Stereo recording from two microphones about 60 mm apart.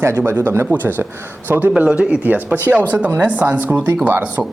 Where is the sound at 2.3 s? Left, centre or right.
Right.